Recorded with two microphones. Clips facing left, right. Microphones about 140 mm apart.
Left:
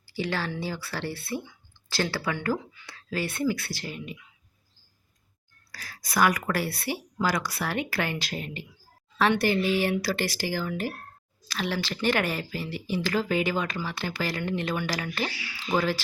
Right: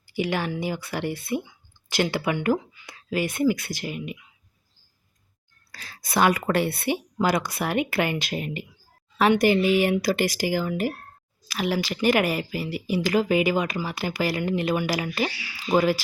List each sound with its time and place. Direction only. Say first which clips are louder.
0.1 s speech: right 4 dB; 15° right (ahead or behind)
5.7 s a woman's voice: right 3 dB; 25° right (ahead or behind)